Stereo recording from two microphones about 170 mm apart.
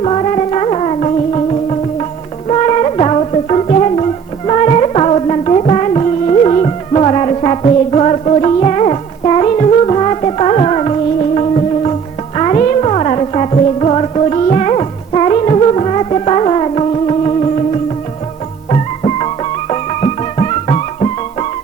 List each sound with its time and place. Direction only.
0.0 s music: 40° left (ahead or behind)
18.7 s music: 35° left (ahead or behind)